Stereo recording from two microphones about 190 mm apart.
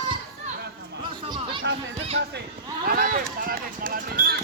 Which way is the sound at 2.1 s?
65° right (ahead or behind).